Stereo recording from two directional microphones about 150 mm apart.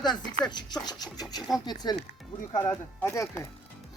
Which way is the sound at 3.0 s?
20° left (ahead or behind).